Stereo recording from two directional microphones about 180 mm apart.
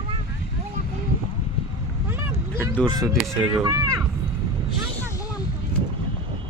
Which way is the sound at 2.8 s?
20° right (ahead or behind).